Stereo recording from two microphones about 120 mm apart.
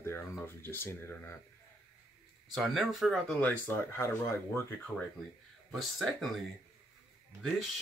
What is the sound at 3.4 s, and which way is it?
Speech, 15° left (ahead or behind).